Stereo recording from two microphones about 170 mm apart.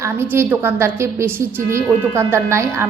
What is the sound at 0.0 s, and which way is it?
A woman's voice, 15° right (ahead or behind).